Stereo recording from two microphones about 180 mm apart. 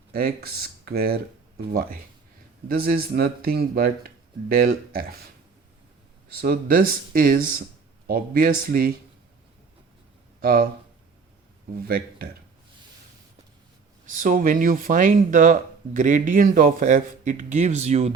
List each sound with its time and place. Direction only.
0.1 s speech: 60° right (ahead or behind)
6.4 s speech: 55° right (ahead or behind)
10.4 s speech: 60° right (ahead or behind)
14.1 s speech: 50° right (ahead or behind)